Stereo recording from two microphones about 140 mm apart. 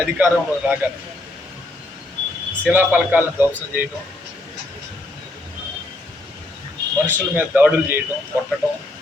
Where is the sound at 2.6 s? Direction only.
15° right (ahead or behind).